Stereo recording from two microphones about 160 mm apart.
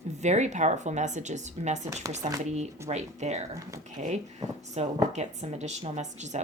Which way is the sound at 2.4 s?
45° right (ahead or behind).